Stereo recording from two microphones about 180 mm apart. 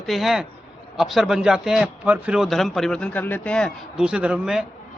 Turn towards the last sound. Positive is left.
turn(degrees=-5)  # may be behind; listen again after turning